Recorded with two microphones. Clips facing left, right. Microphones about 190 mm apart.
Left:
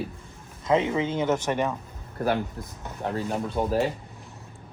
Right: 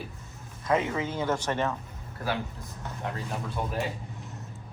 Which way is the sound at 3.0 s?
35° left (ahead or behind).